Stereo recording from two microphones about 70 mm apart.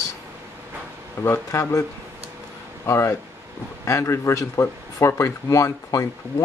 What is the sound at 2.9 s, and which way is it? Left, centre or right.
A man's voice, left.